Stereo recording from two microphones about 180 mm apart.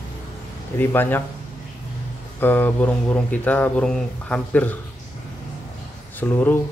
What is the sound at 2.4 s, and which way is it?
Speech, 10° left (ahead or behind).